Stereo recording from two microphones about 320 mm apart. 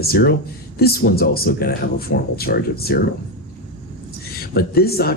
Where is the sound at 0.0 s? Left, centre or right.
Left.